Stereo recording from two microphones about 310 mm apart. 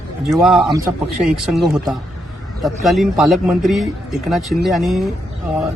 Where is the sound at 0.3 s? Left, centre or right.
Centre.